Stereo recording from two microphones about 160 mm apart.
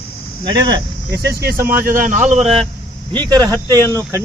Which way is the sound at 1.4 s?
70° right (ahead or behind).